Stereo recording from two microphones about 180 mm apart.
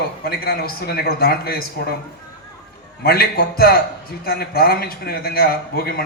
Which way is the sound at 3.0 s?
60° left (ahead or behind).